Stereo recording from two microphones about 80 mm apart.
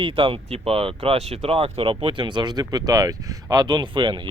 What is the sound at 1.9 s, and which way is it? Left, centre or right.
Speech, right.